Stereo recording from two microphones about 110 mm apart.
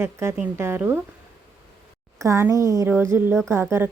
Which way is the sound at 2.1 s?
25° right (ahead or behind).